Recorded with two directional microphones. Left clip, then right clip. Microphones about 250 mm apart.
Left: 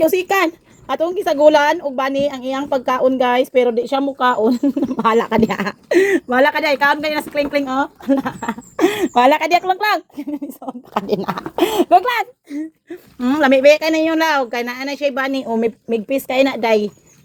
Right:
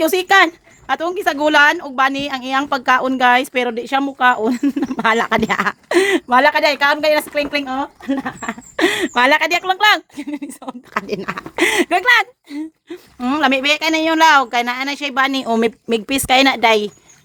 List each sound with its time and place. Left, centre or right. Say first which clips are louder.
0.0 s a woman's voice: right 3 dB; centre
13.1 s speech: left 2 dB; centre
15.5 s a woman's voice: right 2 dB; right